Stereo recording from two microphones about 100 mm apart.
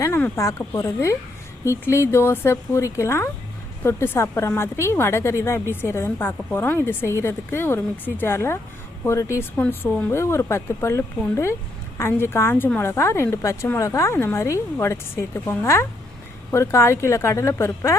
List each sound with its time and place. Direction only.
0.8 s a woman's voice: 30° left (ahead or behind)
9.6 s a woman's voice: 15° left (ahead or behind)
10.1 s a woman's voice: 25° left (ahead or behind)